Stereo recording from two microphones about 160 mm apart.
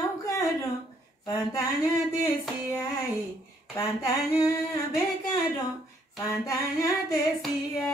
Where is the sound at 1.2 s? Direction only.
20° left (ahead or behind).